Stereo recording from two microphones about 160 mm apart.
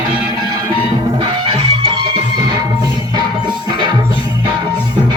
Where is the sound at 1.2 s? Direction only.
35° right (ahead or behind).